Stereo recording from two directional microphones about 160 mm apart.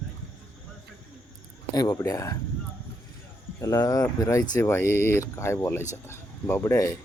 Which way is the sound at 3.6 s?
20° left (ahead or behind).